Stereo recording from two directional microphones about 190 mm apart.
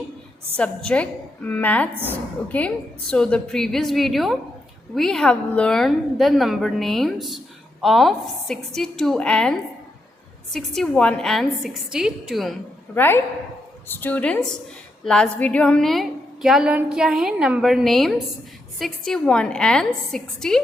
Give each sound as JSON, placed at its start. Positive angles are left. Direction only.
{"t": 0.5, "sound": "a woman's voice", "side_deg": 5}
{"t": 12.9, "sound": "a woman's voice", "side_deg": 10}